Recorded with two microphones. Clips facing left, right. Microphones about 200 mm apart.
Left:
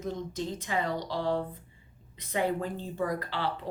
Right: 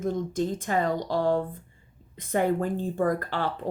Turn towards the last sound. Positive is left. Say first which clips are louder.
# right 3 dB
turn(degrees=-50)  # may be behind; listen again after turning